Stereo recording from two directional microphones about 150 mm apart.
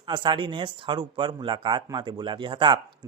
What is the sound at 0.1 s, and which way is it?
Speech, 35° right (ahead or behind).